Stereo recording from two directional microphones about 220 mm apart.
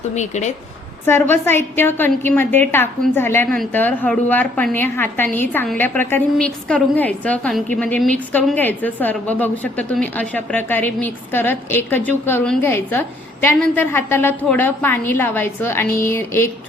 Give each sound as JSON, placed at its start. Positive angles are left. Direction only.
{"t": 0.2, "sound": "speech", "side_deg": 30}
{"t": 1.0, "sound": "a woman's voice", "side_deg": 10}